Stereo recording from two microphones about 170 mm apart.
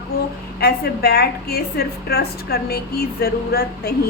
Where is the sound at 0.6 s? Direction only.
65° left (ahead or behind).